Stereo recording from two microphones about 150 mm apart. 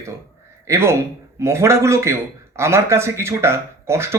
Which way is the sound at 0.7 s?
15° right (ahead or behind).